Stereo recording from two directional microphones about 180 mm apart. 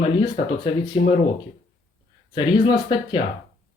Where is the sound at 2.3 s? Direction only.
30° left (ahead or behind).